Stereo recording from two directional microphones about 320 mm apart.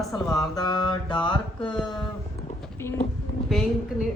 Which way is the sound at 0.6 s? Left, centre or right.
Centre.